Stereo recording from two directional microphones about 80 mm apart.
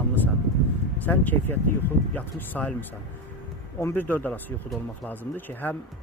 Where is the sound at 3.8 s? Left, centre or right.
Left.